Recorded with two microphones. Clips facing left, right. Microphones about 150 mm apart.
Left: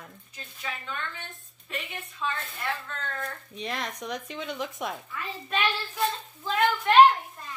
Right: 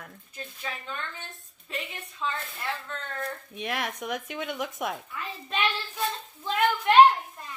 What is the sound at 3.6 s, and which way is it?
Speech, 5° right (ahead or behind).